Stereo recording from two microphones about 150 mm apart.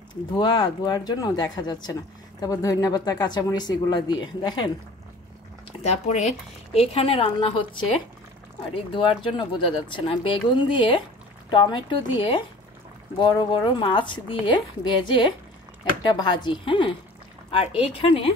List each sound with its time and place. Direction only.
0.1 s speech: 30° left (ahead or behind)
5.7 s a woman's voice: 50° left (ahead or behind)
8.9 s a woman's voice: 35° left (ahead or behind)